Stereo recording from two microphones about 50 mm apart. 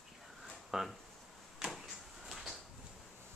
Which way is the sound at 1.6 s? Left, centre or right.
Centre.